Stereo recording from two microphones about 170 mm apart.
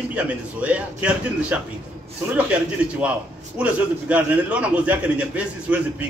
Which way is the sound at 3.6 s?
10° right (ahead or behind).